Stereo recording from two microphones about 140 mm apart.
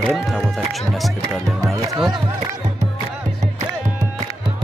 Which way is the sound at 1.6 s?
25° right (ahead or behind).